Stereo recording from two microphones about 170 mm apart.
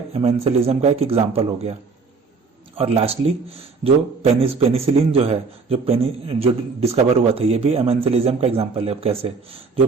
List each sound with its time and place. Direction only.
0.1 s a man's voice: 35° right (ahead or behind)